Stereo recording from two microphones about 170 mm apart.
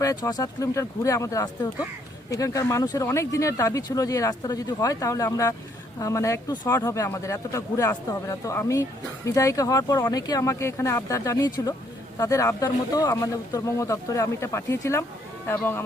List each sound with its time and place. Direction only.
0.0 s speech: 20° left (ahead or behind)